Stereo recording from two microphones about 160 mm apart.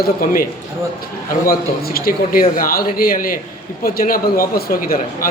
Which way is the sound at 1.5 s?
65° left (ahead or behind).